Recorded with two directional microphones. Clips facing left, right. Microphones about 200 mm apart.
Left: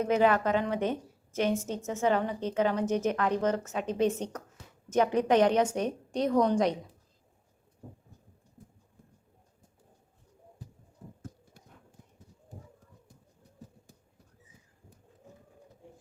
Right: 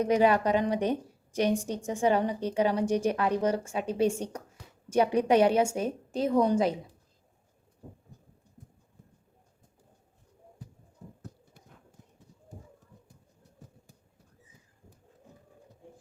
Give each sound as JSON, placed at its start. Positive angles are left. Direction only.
{"t": 0.0, "sound": "a woman's voice", "side_deg": -15}